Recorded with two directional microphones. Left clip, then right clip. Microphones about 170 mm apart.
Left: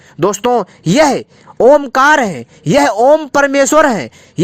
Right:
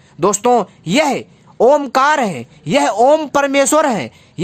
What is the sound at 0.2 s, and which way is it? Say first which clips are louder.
A woman's voice: even; 30° left (ahead or behind).